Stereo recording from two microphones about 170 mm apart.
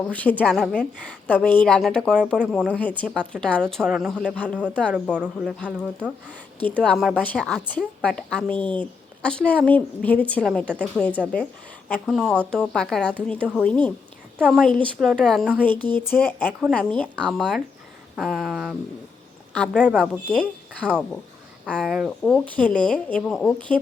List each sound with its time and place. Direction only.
0.1 s a woman's voice: 10° left (ahead or behind)
5.1 s speech: 10° right (ahead or behind)
6.7 s a woman's voice: 5° left (ahead or behind)
14.3 s a woman's voice: 10° right (ahead or behind)
14.6 s a woman's voice: 5° left (ahead or behind)
15.7 s speech: 25° right (ahead or behind)
16.0 s a woman's voice: 10° left (ahead or behind)
16.5 s a woman's voice: 5° right (ahead or behind)
16.7 s a woman's voice: 5° left (ahead or behind)
22.2 s a woman's voice: 5° left (ahead or behind)